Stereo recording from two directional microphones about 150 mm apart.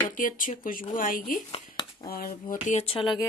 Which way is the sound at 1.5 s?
35° left (ahead or behind).